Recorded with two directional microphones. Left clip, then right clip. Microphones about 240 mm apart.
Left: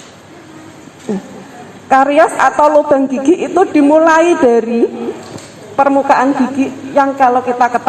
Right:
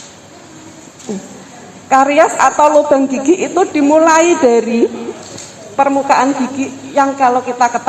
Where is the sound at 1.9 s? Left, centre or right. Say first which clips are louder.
Left 1 dB; left.